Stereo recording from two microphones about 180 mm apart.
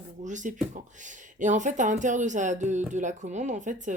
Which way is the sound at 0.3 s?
45° right (ahead or behind).